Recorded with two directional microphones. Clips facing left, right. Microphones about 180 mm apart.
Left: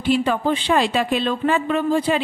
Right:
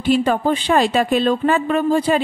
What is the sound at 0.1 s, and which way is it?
A woman's voice, 45° right (ahead or behind).